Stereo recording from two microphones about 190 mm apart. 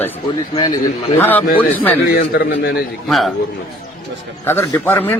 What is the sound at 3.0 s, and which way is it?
Speech, centre (ahead or behind).